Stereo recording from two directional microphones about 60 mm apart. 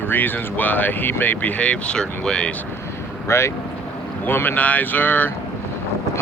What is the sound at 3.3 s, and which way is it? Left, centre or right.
Speech, left.